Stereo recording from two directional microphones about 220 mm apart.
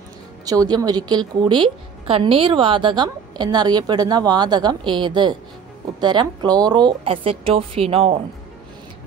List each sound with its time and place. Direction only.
0.5 s a woman's voice: 15° right (ahead or behind)